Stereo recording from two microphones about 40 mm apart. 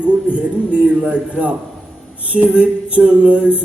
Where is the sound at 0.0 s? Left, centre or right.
Right.